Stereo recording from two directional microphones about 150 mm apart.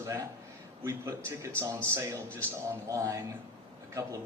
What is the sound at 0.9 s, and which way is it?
A man's voice, 20° right (ahead or behind).